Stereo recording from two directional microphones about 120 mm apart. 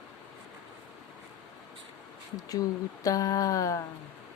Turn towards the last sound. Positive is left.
turn(degrees=25)  # may be behind; listen again after turning